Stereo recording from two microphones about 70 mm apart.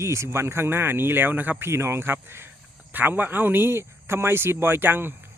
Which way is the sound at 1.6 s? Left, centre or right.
Right.